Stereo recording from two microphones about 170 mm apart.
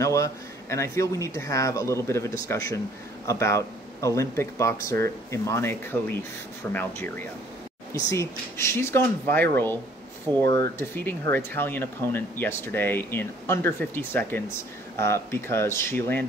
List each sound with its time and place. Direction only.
0.0 s speech: 20° left (ahead or behind)